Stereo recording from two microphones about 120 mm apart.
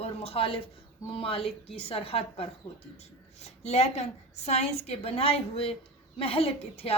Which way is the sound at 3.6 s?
65° left (ahead or behind).